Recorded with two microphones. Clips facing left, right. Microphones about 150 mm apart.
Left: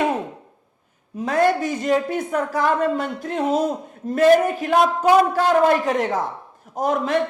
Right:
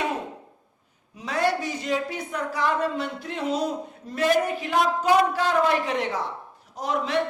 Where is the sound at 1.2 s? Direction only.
50° left (ahead or behind).